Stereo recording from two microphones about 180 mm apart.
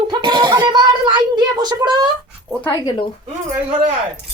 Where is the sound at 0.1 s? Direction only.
25° right (ahead or behind).